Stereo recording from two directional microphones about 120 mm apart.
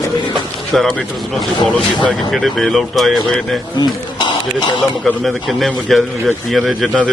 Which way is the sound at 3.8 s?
40° left (ahead or behind).